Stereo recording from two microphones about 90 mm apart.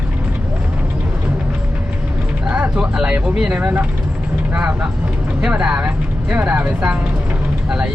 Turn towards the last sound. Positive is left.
turn(degrees=-10)  # may be behind; listen again after turning